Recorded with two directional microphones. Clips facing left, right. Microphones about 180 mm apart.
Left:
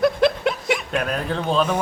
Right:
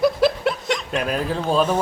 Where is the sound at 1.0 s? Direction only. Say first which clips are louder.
Right 1 dB; 5° right (ahead or behind).